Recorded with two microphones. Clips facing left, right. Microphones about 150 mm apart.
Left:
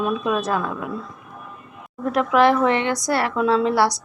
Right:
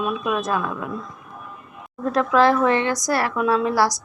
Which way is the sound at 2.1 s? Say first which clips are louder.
Even; 20° left (ahead or behind).